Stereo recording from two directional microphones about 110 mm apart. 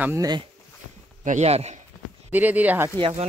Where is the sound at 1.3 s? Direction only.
85° right.